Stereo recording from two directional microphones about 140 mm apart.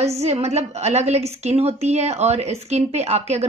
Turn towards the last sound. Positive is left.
turn(degrees=-50)  # may be behind; listen again after turning